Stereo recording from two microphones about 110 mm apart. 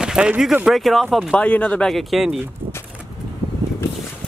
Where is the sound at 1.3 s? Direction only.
10° left (ahead or behind).